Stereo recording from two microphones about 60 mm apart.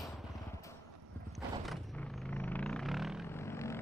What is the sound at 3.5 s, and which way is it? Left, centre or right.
Vehicle, left.